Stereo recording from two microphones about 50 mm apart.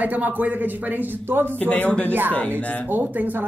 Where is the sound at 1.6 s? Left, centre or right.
Left.